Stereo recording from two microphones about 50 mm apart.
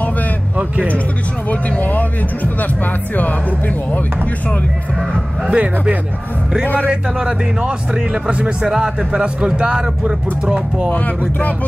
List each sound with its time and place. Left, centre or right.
1.5 s speech: left
5.5 s speech: right
6.6 s speech: left
6.9 s speech: centre
10.9 s speech: left